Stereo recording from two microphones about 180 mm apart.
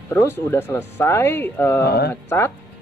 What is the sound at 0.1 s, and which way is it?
Speech, 15° left (ahead or behind).